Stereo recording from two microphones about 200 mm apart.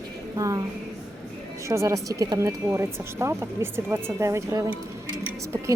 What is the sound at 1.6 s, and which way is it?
Speech, 15° right (ahead or behind).